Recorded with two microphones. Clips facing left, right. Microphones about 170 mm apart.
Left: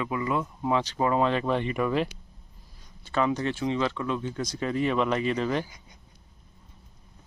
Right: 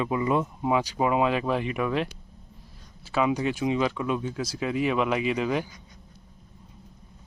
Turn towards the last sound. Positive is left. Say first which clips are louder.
# right 1 dB
turn(degrees=-5)  # may be behind; listen again after turning